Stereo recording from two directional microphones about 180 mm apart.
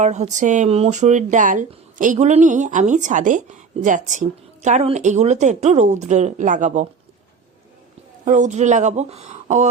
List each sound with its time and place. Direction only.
0.0 s speech: 40° right (ahead or behind)
8.2 s speech: 45° right (ahead or behind)